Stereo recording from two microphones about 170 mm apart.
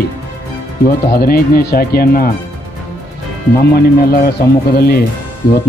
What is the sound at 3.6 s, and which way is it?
Speech, 65° left (ahead or behind).